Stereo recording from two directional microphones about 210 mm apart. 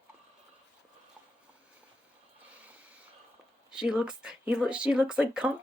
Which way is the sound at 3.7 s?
5° right (ahead or behind).